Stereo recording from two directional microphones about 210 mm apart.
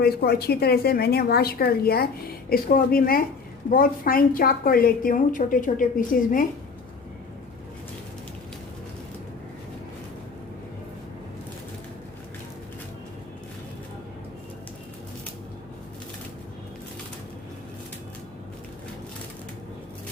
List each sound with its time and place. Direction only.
0.0 s a woman's voice: 50° left (ahead or behind)